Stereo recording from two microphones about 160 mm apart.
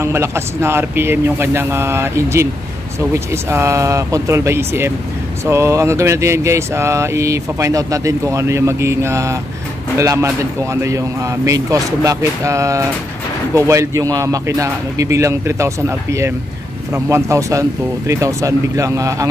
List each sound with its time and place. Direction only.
0.0 s speech: 15° right (ahead or behind)